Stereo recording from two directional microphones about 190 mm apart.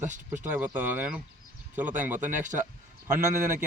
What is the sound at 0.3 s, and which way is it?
Speech, 10° right (ahead or behind).